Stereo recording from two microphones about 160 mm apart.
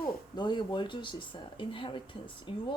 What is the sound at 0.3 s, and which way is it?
Speech, 30° left (ahead or behind).